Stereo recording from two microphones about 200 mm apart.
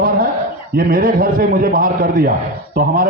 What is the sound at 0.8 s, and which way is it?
A man's voice, 45° right (ahead or behind).